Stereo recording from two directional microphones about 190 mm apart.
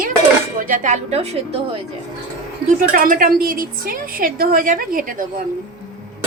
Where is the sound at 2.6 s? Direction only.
45° right (ahead or behind).